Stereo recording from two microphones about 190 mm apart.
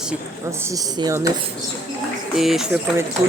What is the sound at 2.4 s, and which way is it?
Speech, centre (ahead or behind).